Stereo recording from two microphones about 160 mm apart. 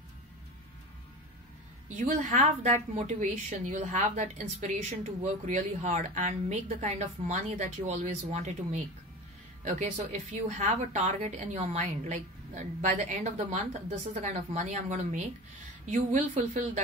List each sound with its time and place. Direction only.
2.0 s a woman's voice: 50° right (ahead or behind)